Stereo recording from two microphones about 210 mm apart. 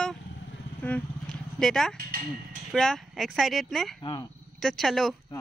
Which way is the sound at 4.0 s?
20° left (ahead or behind).